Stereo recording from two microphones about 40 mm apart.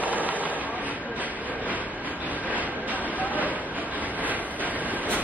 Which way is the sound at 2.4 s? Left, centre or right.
Right.